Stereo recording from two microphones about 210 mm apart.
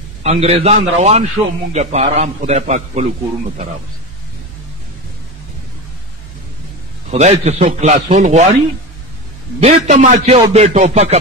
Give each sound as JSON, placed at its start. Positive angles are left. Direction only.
{"t": 0.2, "sound": "a man's voice", "side_deg": -30}
{"t": 7.1, "sound": "a man's voice", "side_deg": -35}
{"t": 9.6, "sound": "a man's voice", "side_deg": -35}